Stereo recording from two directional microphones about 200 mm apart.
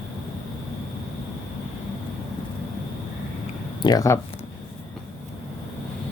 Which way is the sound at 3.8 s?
15° left (ahead or behind).